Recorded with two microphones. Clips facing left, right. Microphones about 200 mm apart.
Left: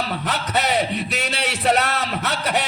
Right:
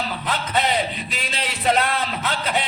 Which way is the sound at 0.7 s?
75° left (ahead or behind).